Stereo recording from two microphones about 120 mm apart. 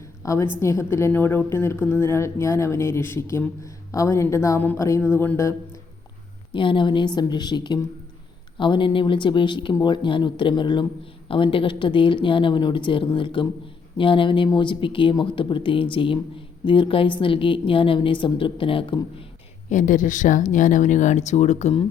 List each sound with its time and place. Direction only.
0.2 s speech: 25° left (ahead or behind)
6.5 s a woman's voice: 45° left (ahead or behind)
19.7 s speech: 90° left; by 21.7 s 70° left (ahead or behind)